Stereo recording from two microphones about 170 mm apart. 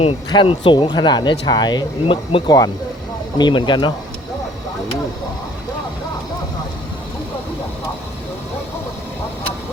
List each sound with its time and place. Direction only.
0.3 s speech: 30° left (ahead or behind)